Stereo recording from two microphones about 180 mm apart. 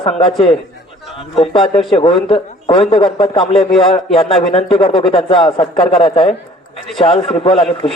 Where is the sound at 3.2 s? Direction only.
30° left (ahead or behind).